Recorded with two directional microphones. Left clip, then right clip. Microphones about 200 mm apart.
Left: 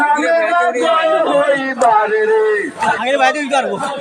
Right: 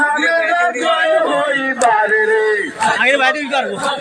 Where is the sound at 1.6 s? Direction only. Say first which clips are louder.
Left 1 dB; 15° left (ahead or behind).